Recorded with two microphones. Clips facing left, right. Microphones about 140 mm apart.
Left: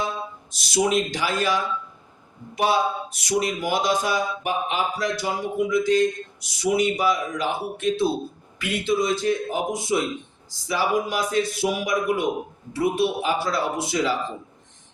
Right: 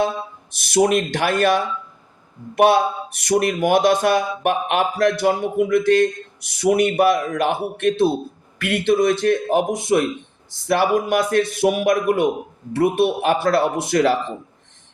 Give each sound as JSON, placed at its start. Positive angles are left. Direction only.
{"t": 0.5, "sound": "speech", "side_deg": -55}